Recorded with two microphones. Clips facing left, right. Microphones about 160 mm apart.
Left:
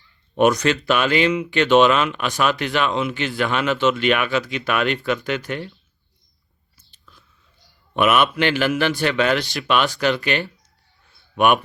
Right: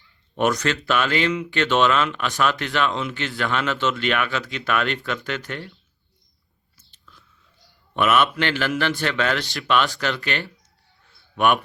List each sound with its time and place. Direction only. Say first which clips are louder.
0.3 s speech: left 5 dB; 15° left (ahead or behind)
6.9 s biting: even; 15° left (ahead or behind)
7.9 s speech: left 2 dB; 15° left (ahead or behind)